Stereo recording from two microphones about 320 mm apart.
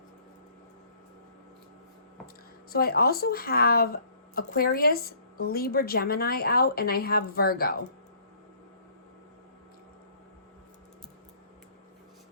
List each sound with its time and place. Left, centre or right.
2.2 s speech: left